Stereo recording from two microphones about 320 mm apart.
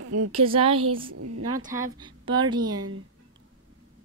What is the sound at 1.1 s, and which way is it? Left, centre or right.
Speech, right.